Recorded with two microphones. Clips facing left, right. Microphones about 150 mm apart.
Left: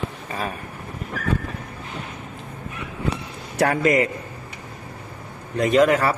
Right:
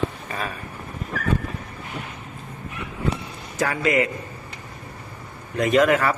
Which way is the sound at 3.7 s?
40° left (ahead or behind).